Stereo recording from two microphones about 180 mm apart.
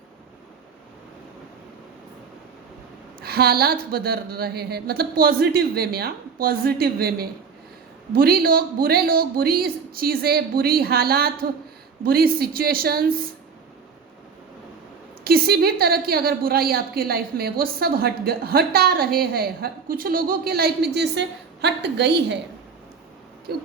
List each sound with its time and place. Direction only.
3.2 s a woman's voice: 60° right (ahead or behind)
15.2 s a woman's voice: 60° right (ahead or behind)
23.5 s a woman's voice: 60° right (ahead or behind)